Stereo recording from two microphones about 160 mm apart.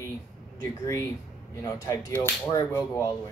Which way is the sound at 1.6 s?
20° left (ahead or behind).